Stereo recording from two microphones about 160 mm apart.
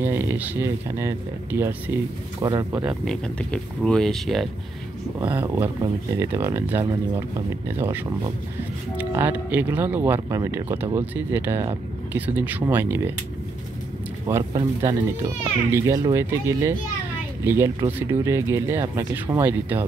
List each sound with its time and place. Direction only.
0.0 s speech: 15° right (ahead or behind)
3.1 s speech: 5° left (ahead or behind)
5.3 s speech: 15° right (ahead or behind)
14.3 s speech: 15° right (ahead or behind)